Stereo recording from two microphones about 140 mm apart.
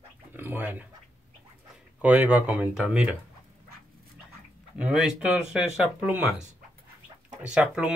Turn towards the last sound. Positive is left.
turn(degrees=-10)  # may be behind; listen again after turning